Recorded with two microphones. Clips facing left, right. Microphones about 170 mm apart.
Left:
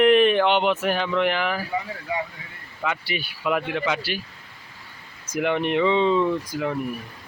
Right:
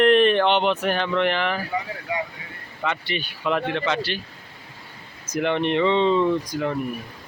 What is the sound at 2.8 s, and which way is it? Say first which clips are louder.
Speech: right 1 dB; 5° left (ahead or behind).